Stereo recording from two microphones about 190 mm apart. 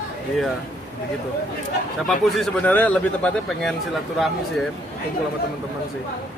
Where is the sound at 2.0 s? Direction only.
Centre (ahead or behind).